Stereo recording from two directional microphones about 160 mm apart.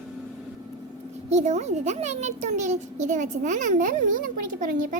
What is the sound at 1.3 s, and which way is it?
A child's voice, 45° right (ahead or behind).